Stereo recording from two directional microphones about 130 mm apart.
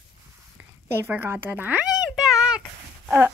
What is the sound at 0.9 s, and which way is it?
Speech, 15° right (ahead or behind).